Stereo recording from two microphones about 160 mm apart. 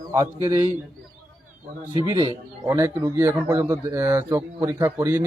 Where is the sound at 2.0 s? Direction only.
25° right (ahead or behind).